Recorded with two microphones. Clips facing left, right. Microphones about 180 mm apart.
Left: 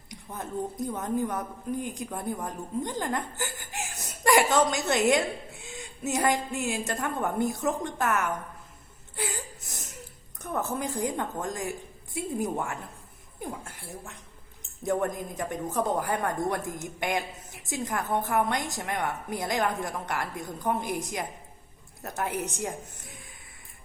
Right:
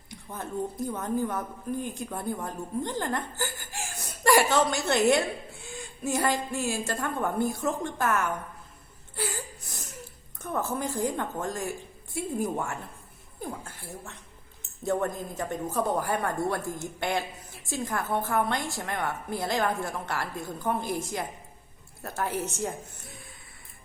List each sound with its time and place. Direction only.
0.1 s a woman's voice: 20° left (ahead or behind)
9.1 s whimper: 20° left (ahead or behind)
10.6 s a woman's voice: 20° left (ahead or behind)
14.8 s a woman's voice: 15° left (ahead or behind)